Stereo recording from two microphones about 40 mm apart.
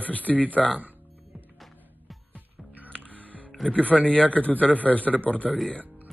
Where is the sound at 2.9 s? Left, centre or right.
Left.